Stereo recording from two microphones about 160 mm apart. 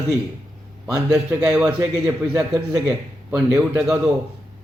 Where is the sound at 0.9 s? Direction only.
5° right (ahead or behind).